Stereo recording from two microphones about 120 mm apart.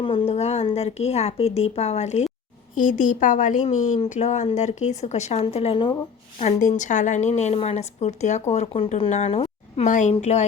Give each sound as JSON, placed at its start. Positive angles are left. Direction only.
{"t": 0.0, "sound": "a woman's voice", "side_deg": 45}
{"t": 2.7, "sound": "a woman's voice", "side_deg": 90}
{"t": 6.4, "sound": "a woman's voice", "side_deg": 90}
{"t": 9.8, "sound": "a woman's voice", "side_deg": 90}